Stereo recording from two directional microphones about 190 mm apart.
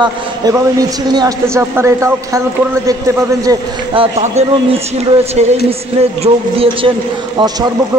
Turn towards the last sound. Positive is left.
turn(degrees=-20)  # may be behind; listen again after turning